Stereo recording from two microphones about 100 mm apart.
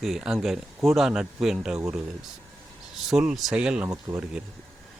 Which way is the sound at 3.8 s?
40° right (ahead or behind).